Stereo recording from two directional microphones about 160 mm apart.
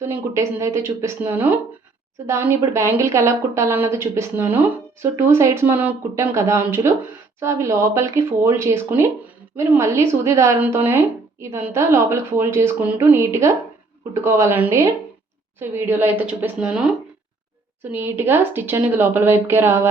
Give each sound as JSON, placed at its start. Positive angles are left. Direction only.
{"t": 0.0, "sound": "speech", "side_deg": -15}
{"t": 17.9, "sound": "speech", "side_deg": -15}